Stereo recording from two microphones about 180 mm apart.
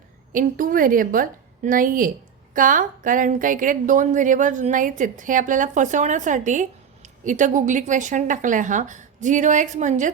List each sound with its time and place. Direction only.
0.3 s a woman's voice: 50° right (ahead or behind)